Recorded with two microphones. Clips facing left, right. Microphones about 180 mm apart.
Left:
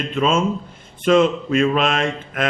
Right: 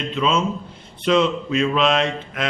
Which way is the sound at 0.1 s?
50° left (ahead or behind).